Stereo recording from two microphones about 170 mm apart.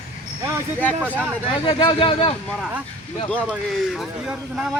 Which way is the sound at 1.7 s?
30° left (ahead or behind).